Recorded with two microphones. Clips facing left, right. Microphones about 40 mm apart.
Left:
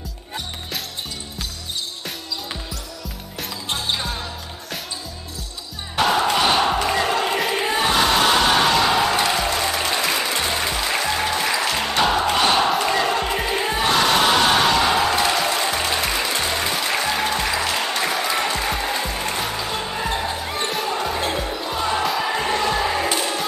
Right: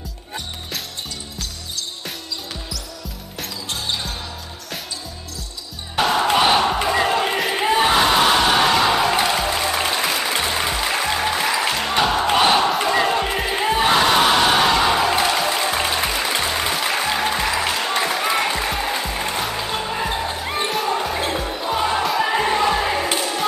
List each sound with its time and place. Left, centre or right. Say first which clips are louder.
5.9 s music: even; centre
6.2 s music: right 2 dB; centre
12.3 s music: right 2 dB; centre
12.5 s crowd: right 1 dB; centre
16.4 s music: right 1 dB; centre
20.4 s basketball bounce: right 2 dB; centre
20.7 s basketball bounce: right 1 dB; centre
22.3 s music: right 3 dB; centre